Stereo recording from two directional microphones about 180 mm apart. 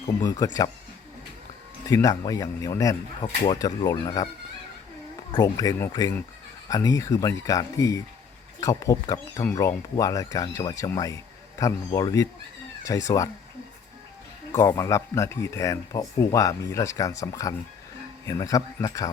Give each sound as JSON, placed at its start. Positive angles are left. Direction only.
{"t": 0.2, "sound": "speech", "side_deg": 20}
{"t": 1.9, "sound": "speech", "side_deg": 20}
{"t": 5.3, "sound": "speech", "side_deg": 20}
{"t": 14.5, "sound": "speech", "side_deg": 20}